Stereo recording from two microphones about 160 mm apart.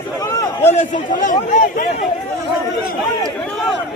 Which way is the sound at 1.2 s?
55° left (ahead or behind).